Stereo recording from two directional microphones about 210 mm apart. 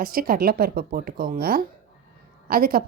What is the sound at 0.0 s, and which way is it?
A woman's voice, 45° right (ahead or behind).